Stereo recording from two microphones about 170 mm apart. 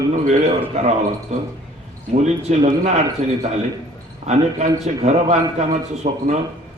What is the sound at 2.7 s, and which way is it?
Speech, 40° right (ahead or behind).